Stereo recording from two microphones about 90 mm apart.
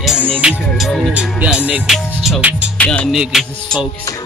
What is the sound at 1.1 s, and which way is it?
Speech, 15° right (ahead or behind).